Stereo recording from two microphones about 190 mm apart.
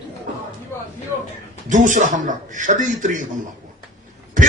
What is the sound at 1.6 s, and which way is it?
Speech, 40° right (ahead or behind).